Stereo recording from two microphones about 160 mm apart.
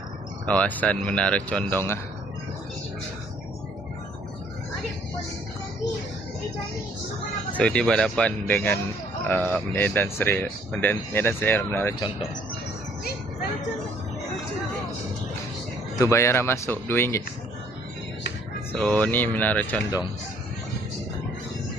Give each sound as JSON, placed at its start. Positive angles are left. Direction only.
{"t": 0.4, "sound": "speech", "side_deg": 10}
{"t": 7.5, "sound": "speech", "side_deg": 5}
{"t": 16.0, "sound": "speech", "side_deg": 20}
{"t": 18.7, "sound": "speech", "side_deg": 10}